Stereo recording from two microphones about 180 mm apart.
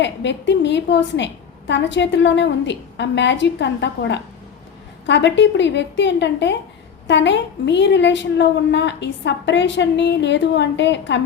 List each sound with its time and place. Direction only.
0.0 s a woman's voice: 75° left (ahead or behind)